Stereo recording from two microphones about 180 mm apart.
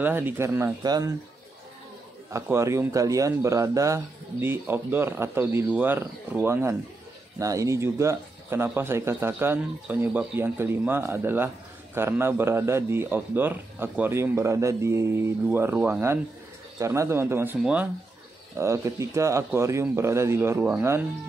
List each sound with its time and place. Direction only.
0.0 s speech: 10° right (ahead or behind)
2.3 s speech: 15° right (ahead or behind)